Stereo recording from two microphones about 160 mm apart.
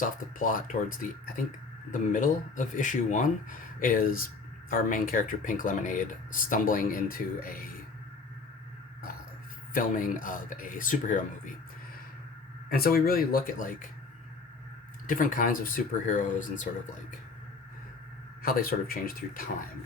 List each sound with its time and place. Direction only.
0.0 s speech: 55° left (ahead or behind)
9.7 s speech: 55° left (ahead or behind)
12.7 s speech: 70° left (ahead or behind)
15.0 s speech: 55° left (ahead or behind)
18.4 s speech: 65° left (ahead or behind)